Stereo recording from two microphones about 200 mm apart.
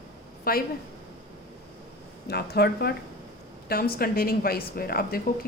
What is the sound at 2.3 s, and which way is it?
A woman's voice, 55° left (ahead or behind).